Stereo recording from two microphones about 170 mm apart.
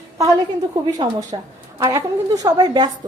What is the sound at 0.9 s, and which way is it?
A woman's voice, 20° right (ahead or behind).